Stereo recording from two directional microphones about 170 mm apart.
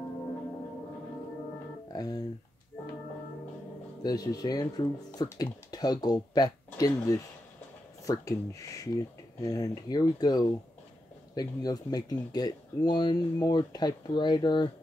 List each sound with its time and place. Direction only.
1.9 s speech: 20° left (ahead or behind)
4.0 s speech: 20° left (ahead or behind)